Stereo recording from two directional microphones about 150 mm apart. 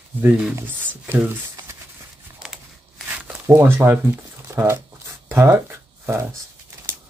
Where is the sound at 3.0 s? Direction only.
10° right (ahead or behind).